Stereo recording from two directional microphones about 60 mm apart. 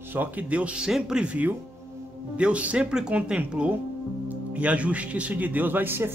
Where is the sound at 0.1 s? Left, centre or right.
Right.